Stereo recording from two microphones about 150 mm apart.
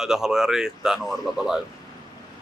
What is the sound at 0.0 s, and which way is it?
Speech, 5° right (ahead or behind).